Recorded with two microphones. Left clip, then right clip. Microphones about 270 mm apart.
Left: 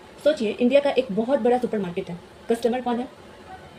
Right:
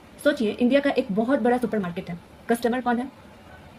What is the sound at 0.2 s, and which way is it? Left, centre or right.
A woman's voice, right.